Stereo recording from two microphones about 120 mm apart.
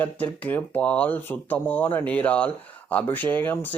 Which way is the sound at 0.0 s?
15° left (ahead or behind).